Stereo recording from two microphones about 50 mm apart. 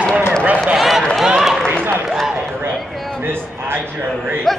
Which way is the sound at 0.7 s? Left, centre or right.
Centre.